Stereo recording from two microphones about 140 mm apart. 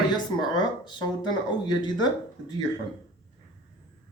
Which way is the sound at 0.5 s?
30° left (ahead or behind).